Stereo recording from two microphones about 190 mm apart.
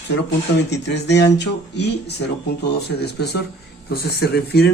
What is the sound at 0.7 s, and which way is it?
Speech, 65° left (ahead or behind).